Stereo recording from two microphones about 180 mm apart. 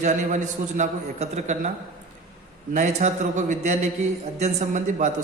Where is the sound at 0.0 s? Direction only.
40° right (ahead or behind).